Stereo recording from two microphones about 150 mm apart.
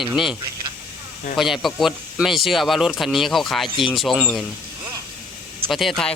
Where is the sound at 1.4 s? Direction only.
Centre (ahead or behind).